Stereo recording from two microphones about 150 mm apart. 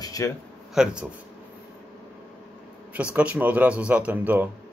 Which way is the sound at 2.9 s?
10° right (ahead or behind).